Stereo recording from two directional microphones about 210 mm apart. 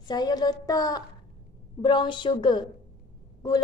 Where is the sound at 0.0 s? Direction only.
20° left (ahead or behind).